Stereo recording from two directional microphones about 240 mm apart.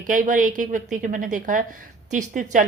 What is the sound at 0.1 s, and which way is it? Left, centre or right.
Speech, right.